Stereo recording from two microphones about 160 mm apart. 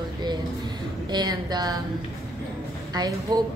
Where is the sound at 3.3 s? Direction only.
25° right (ahead or behind).